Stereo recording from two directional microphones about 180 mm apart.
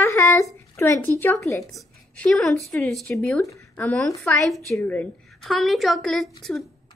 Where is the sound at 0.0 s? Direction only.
15° left (ahead or behind).